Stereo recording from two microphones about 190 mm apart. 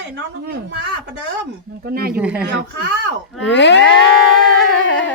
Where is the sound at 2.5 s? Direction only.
65° right (ahead or behind).